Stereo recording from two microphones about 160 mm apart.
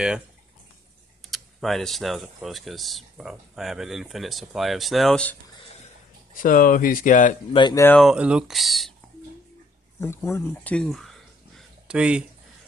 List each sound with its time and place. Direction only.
1.2 s speech: centre (ahead or behind)
6.3 s speech: 55° left (ahead or behind)
7.7 s speech: 15° left (ahead or behind)
8.0 s speech: 5° right (ahead or behind)
9.9 s speech: 15° left (ahead or behind)
10.9 s a sound: centre (ahead or behind)